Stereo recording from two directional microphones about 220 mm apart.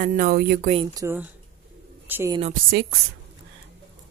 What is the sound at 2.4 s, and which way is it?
Speech, 40° right (ahead or behind).